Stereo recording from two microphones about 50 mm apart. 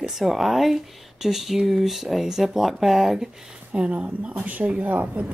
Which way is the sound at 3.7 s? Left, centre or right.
Right.